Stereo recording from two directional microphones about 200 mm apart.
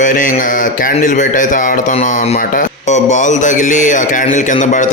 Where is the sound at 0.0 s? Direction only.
40° left (ahead or behind).